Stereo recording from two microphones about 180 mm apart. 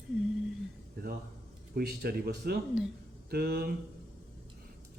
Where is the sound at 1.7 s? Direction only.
60° right (ahead or behind).